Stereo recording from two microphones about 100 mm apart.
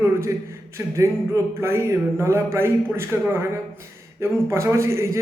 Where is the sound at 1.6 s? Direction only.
25° right (ahead or behind).